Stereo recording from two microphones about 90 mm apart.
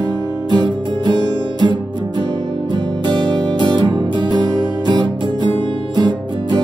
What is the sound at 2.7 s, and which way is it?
Music, 55° right (ahead or behind).